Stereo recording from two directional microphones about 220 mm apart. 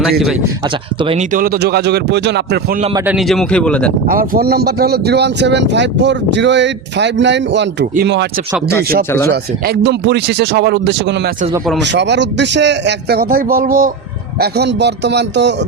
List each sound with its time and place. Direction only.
0.0 s speech: centre (ahead or behind)
1.3 s speech: 40° right (ahead or behind)
3.1 s speech: centre (ahead or behind)
4.1 s speech: 40° right (ahead or behind)
9.3 s speech: 50° right (ahead or behind)